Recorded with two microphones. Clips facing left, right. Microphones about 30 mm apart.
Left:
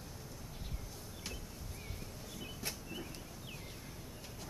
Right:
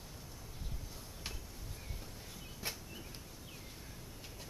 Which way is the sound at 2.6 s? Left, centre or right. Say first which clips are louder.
Right 1 dB; centre.